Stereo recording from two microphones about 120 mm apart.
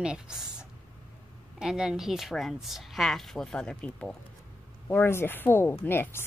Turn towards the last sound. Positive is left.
turn(degrees=20)  # may be behind; listen again after turning